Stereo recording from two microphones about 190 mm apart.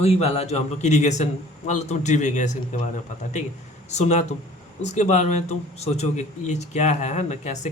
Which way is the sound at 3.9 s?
35° left (ahead or behind).